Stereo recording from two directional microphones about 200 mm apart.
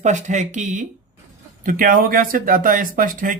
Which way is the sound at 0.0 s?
35° right (ahead or behind).